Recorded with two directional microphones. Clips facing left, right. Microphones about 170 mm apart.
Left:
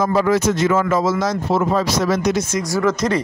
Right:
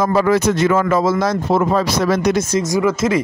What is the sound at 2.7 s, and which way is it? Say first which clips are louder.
Speech: right 1 dB; 10° right (ahead or behind).